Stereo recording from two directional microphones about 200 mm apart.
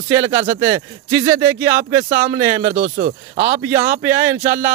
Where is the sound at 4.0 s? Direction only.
10° right (ahead or behind).